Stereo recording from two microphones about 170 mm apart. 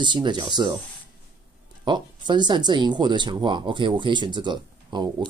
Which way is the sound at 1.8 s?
25° right (ahead or behind).